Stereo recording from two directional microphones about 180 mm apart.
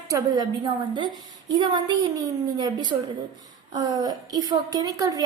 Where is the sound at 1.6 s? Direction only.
20° right (ahead or behind).